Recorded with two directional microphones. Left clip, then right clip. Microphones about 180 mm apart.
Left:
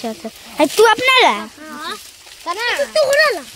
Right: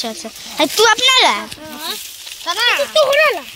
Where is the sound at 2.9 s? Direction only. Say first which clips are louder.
Even; 30° left (ahead or behind).